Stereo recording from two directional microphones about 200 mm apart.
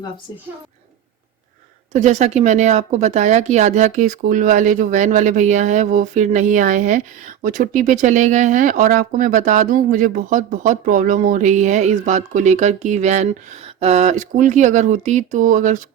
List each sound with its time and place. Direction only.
1.9 s a woman's voice: 35° right (ahead or behind)